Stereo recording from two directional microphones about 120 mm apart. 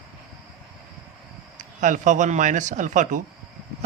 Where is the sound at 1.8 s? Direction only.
90° right.